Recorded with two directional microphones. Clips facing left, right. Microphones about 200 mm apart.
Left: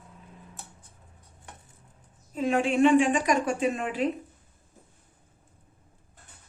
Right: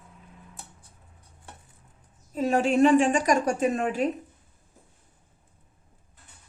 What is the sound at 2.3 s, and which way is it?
A woman's voice, 40° right (ahead or behind).